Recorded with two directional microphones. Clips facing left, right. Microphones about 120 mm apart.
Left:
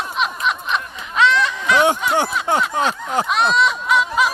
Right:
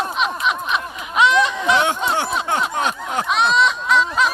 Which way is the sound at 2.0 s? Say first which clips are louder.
Left 1 dB; 25° right (ahead or behind).